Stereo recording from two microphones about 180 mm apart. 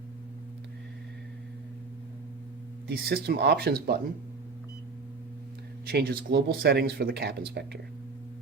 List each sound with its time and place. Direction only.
2.8 s speech: 60° right (ahead or behind)
5.8 s speech: 60° right (ahead or behind)